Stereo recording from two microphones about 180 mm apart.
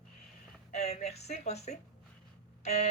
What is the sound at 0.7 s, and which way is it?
Speech, 40° left (ahead or behind).